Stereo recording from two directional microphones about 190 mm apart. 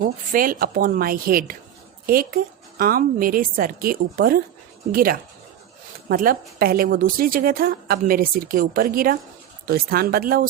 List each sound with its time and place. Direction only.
0.0 s speech: 50° right (ahead or behind)